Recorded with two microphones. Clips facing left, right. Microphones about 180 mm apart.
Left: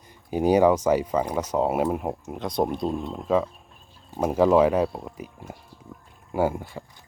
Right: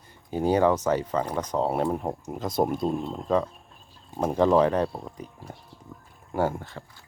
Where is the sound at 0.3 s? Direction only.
10° left (ahead or behind).